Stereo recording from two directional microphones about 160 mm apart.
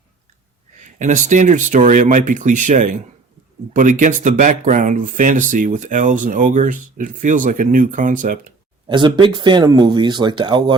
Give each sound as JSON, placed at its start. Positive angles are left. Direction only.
{"t": 0.8, "sound": "speech", "side_deg": -50}
{"t": 8.9, "sound": "speech", "side_deg": -30}